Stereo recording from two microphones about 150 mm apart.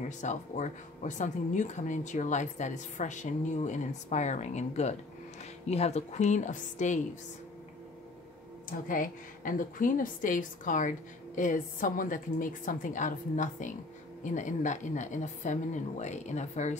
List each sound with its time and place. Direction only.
0.2 s speech: 55° left (ahead or behind)
8.6 s a woman's voice: 65° left (ahead or behind)